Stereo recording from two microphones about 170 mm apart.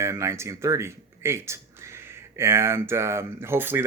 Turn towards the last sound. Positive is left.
turn(degrees=-10)  # may be behind; listen again after turning